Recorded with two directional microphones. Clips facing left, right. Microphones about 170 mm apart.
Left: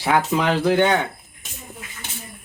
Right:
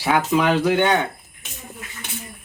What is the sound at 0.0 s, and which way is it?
Speech, 5° right (ahead or behind).